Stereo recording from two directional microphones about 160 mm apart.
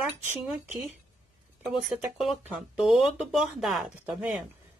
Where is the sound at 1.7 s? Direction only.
Centre (ahead or behind).